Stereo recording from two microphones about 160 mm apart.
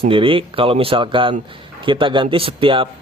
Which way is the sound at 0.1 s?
35° right (ahead or behind).